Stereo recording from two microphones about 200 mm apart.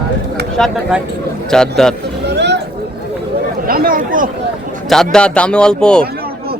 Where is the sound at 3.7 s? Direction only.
45° right (ahead or behind).